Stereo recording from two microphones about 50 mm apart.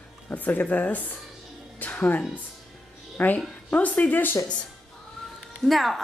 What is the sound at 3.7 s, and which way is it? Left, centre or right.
Speech, left.